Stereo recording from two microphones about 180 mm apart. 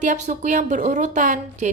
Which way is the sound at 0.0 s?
45° right (ahead or behind).